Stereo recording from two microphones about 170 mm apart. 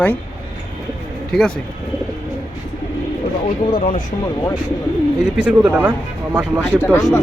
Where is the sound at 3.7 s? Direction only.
55° left (ahead or behind).